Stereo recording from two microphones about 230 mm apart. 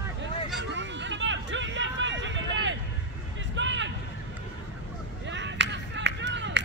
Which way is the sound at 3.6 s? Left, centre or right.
Right.